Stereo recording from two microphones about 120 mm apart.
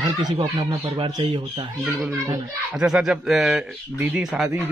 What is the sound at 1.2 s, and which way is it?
Speech, 50° right (ahead or behind).